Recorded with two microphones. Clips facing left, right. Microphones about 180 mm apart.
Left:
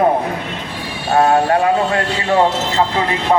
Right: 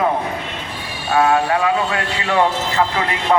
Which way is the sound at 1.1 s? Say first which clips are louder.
Left 3 dB; 40° left (ahead or behind).